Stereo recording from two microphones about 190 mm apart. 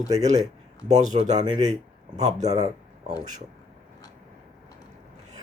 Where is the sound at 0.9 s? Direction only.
40° right (ahead or behind).